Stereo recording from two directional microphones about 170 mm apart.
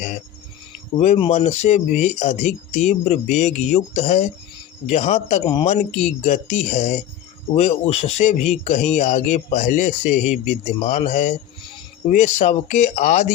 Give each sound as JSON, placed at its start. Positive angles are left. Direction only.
{"t": 0.9, "sound": "speech", "side_deg": 40}